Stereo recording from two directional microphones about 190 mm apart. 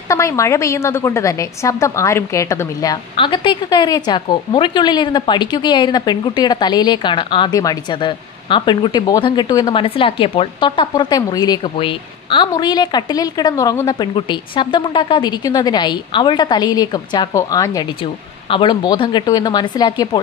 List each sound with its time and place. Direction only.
0.1 s a woman's voice: 15° left (ahead or behind)